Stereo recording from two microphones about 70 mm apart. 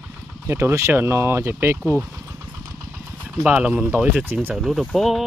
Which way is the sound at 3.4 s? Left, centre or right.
Centre.